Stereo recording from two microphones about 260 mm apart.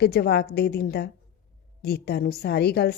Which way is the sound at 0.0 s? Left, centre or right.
Left.